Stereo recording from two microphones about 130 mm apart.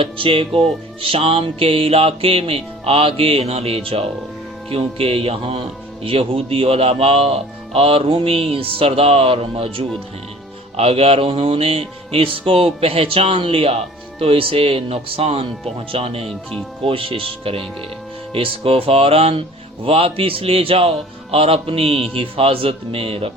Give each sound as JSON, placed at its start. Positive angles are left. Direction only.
{"t": 0.0, "sound": "music", "side_deg": -45}